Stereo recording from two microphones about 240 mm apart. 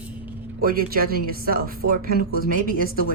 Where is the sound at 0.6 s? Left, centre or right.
Right.